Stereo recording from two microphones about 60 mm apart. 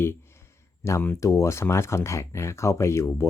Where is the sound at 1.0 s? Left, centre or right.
Left.